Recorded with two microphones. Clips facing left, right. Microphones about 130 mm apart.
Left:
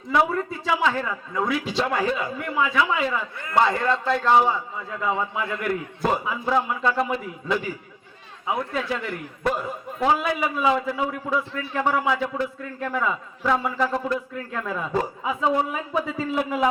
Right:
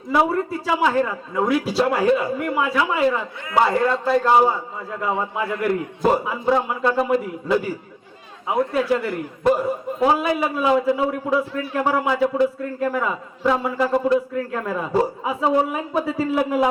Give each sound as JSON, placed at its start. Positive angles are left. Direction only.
{"t": 0.1, "sound": "a man's voice", "side_deg": -5}